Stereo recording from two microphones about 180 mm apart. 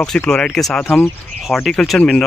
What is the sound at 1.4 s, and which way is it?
Speech, centre (ahead or behind).